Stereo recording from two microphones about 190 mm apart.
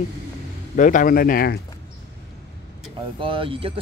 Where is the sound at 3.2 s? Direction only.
25° right (ahead or behind).